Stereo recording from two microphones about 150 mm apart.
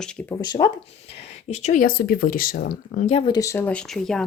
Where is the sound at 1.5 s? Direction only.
50° left (ahead or behind).